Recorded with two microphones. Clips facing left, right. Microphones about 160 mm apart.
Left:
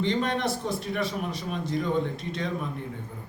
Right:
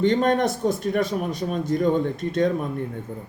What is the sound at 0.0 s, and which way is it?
A man's voice, 50° right (ahead or behind).